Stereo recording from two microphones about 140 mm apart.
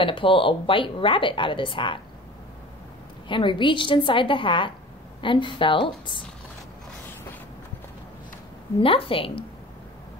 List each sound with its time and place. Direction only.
0.0 s speech: 40° left (ahead or behind)
3.3 s speech: 35° left (ahead or behind)
8.8 s speech: 40° left (ahead or behind)